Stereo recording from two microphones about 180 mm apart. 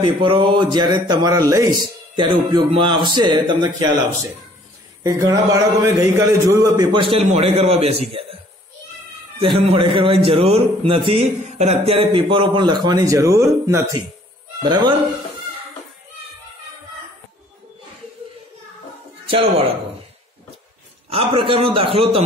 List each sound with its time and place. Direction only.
0.0 s speech: 25° right (ahead or behind)
9.4 s speech: 30° right (ahead or behind)
21.1 s speech: 30° right (ahead or behind)